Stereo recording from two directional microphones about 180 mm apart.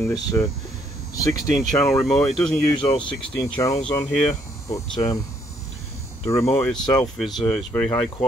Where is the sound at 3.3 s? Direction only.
5° left (ahead or behind).